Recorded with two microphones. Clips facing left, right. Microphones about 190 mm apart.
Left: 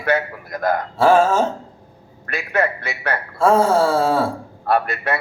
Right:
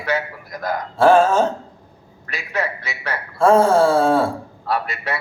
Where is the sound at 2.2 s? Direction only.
55° left (ahead or behind).